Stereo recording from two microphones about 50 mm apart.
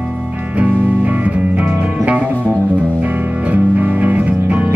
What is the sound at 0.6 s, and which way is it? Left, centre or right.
Music, right.